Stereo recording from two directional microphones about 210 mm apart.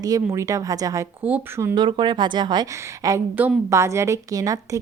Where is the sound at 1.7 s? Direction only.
20° right (ahead or behind).